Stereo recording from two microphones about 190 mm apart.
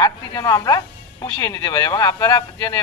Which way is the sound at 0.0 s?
20° left (ahead or behind).